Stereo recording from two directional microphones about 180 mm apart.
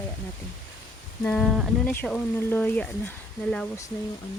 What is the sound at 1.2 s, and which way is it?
Speech, 10° left (ahead or behind).